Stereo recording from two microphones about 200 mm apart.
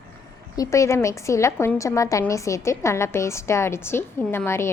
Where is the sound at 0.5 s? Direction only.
15° left (ahead or behind).